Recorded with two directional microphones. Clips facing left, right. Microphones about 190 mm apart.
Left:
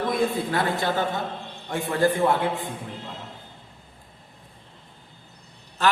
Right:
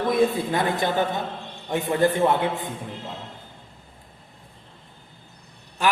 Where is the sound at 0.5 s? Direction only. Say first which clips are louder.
Right 1 dB; 20° right (ahead or behind).